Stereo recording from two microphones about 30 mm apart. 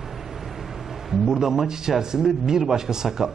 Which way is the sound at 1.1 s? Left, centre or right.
Centre.